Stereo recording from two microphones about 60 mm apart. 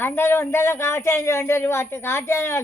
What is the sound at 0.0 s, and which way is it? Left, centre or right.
Speech, left.